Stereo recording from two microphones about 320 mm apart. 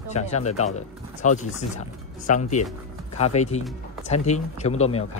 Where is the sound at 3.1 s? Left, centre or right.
Centre.